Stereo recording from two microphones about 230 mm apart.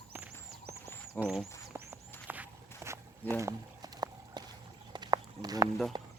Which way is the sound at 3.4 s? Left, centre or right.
Centre.